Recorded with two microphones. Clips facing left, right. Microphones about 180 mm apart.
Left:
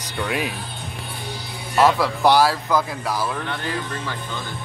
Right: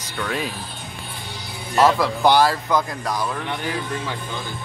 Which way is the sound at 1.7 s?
Centre (ahead or behind).